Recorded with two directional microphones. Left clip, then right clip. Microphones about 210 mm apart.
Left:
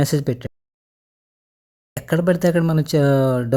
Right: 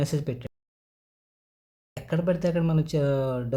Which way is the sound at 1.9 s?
40° left (ahead or behind).